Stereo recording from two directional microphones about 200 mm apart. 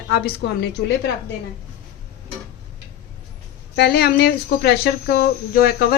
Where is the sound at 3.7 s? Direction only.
55° left (ahead or behind).